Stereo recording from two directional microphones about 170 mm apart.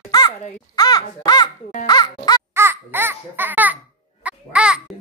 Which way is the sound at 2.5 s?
15° right (ahead or behind).